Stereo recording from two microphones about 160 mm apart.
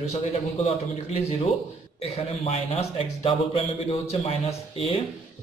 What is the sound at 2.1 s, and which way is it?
A man's voice, 40° left (ahead or behind).